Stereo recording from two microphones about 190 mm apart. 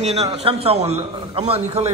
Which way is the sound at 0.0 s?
35° right (ahead or behind).